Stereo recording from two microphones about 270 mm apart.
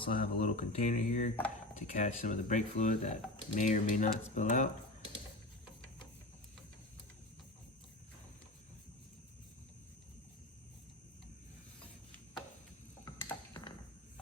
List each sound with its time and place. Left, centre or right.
0.1 s speech: left
13.1 s mechanisms: centre